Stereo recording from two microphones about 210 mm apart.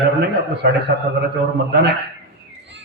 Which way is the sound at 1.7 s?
55° right (ahead or behind).